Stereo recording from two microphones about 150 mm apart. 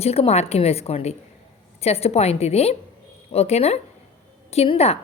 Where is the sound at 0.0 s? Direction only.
45° left (ahead or behind).